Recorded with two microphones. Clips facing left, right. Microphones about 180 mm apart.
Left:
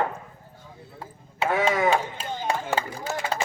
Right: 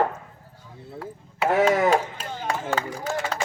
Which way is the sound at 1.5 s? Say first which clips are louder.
Right 4 dB; 40° right (ahead or behind).